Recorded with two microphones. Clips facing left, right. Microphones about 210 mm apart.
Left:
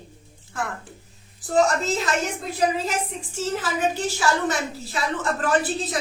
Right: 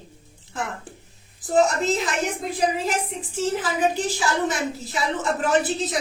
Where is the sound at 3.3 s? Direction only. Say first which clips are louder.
Right 2 dB; 15° right (ahead or behind).